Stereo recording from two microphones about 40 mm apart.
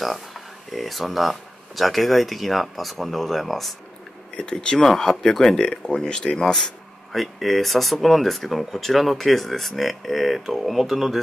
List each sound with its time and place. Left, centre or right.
0.0 s speech: centre
4.4 s speech: centre